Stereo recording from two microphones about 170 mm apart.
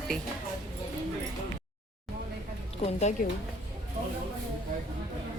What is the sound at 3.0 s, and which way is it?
Speech, 45° left (ahead or behind).